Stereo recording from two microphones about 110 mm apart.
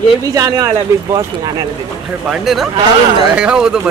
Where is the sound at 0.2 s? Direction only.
30° right (ahead or behind).